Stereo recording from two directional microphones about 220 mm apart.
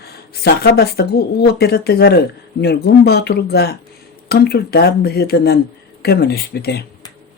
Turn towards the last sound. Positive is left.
turn(degrees=45)  # may be behind; listen again after turning